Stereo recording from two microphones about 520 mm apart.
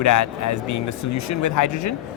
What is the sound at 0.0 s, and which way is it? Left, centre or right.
Speech, left.